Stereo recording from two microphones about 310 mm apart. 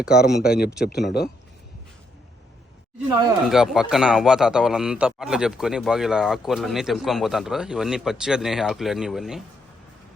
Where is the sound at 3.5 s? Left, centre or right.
Centre.